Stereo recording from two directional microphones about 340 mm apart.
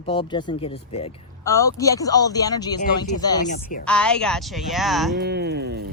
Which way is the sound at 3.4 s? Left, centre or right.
Left.